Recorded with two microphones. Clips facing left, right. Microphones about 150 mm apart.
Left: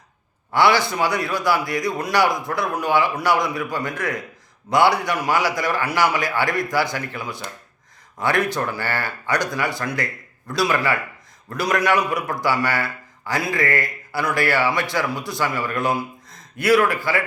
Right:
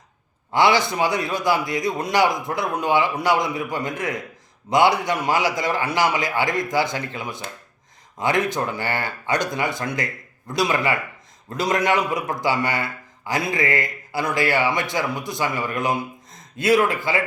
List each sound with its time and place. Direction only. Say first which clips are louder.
0.5 s a man's voice: even; 20° right (ahead or behind)